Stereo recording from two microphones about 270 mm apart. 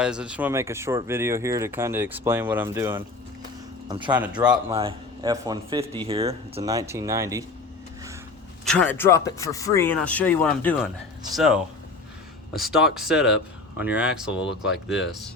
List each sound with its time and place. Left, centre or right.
0.0 s speech: centre
4.1 s speech: centre
4.5 s speech: centre
8.6 s speech: centre
12.5 s speech: centre